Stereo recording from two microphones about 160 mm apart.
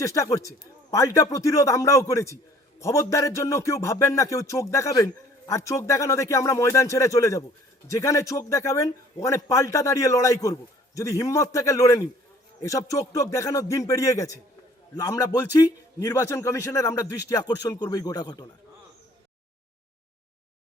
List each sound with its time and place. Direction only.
0.0 s music: 20° left (ahead or behind)